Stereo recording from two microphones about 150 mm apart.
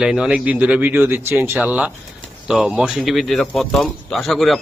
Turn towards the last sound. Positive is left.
turn(degrees=0)  # may be behind; listen again after turning